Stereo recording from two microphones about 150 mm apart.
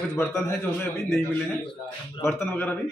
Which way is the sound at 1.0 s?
Centre (ahead or behind).